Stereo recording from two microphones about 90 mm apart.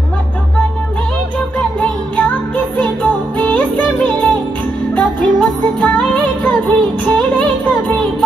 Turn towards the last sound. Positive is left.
turn(degrees=15)  # may be behind; listen again after turning